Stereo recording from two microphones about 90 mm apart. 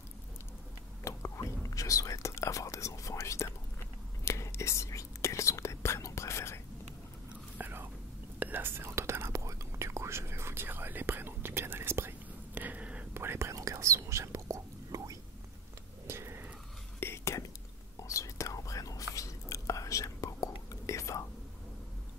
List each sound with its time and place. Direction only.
1.0 s whispering: 30° left (ahead or behind)
7.5 s whispering: 20° right (ahead or behind)
13.1 s whispering: 25° right (ahead or behind)
16.1 s a sound: 30° right (ahead or behind)
17.0 s whispering: 30° left (ahead or behind)